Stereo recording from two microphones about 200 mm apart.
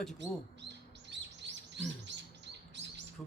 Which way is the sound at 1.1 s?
60° right (ahead or behind).